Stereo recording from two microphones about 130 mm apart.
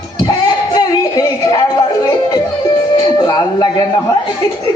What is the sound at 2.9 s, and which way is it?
Music, 30° left (ahead or behind).